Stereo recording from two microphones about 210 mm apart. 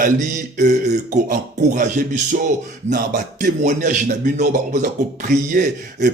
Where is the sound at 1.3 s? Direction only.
40° right (ahead or behind).